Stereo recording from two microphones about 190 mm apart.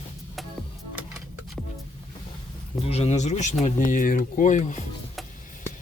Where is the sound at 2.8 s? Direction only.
35° left (ahead or behind).